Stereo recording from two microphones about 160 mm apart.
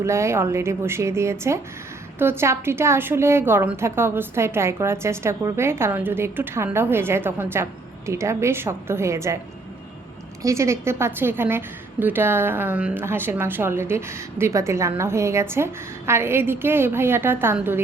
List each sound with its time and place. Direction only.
0.0 s a woman's voice: 15° right (ahead or behind)
10.4 s a woman's voice: 15° right (ahead or behind)